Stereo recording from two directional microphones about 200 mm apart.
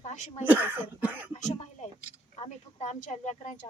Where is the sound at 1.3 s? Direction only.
35° left (ahead or behind).